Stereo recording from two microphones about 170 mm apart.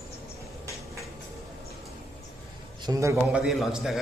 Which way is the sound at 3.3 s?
Centre (ahead or behind).